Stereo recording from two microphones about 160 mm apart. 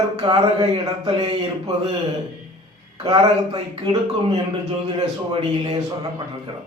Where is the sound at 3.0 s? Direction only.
35° right (ahead or behind).